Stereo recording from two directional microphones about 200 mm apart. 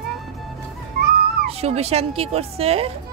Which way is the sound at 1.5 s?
30° right (ahead or behind).